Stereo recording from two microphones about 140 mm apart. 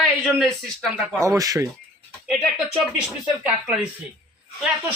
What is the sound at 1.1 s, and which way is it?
Speech, 25° right (ahead or behind).